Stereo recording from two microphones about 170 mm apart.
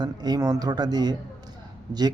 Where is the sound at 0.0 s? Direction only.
25° right (ahead or behind).